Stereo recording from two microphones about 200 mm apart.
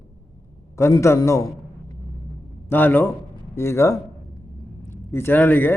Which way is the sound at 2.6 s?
10° left (ahead or behind).